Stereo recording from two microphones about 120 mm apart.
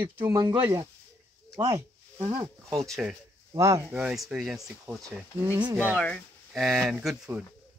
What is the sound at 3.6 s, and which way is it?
Speech, 25° right (ahead or behind).